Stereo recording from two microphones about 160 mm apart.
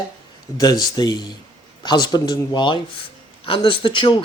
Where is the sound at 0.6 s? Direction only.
25° left (ahead or behind).